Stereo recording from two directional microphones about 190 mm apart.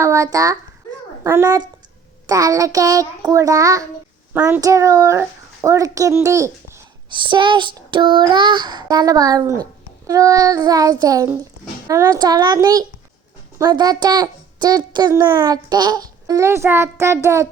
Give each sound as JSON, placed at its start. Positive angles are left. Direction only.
{"t": 0.0, "sound": "a child's voice", "side_deg": -15}
{"t": 7.1, "sound": "a child's voice", "side_deg": -25}